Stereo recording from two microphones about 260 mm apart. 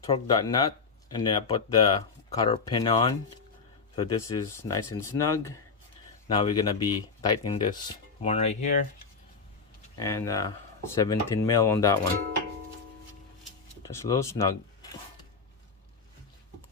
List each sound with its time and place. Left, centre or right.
0.0 s speech: centre
10.0 s speech: centre
13.8 s speech: centre